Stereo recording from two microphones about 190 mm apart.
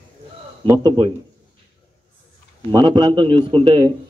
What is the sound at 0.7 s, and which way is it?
Speech, 20° right (ahead or behind).